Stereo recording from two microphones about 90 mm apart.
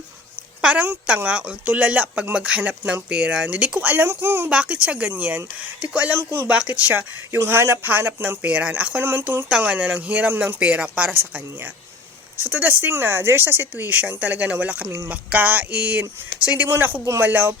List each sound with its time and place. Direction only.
0.6 s speech: 10° right (ahead or behind)
4.4 s speech: 15° right (ahead or behind)
6.1 s speech: 30° right (ahead or behind)
6.5 s speech: 15° right (ahead or behind)
7.3 s speech: 30° right (ahead or behind)
9.5 s speech: 10° right (ahead or behind)
12.4 s speech: 20° right (ahead or behind)
14.8 s speech: 30° right (ahead or behind)
15.1 s speech: 15° right (ahead or behind)